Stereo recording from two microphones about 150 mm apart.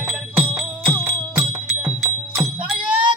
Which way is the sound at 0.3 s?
10° right (ahead or behind).